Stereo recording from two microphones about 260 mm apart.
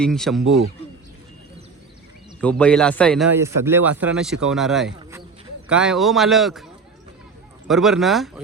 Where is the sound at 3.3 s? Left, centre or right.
Centre.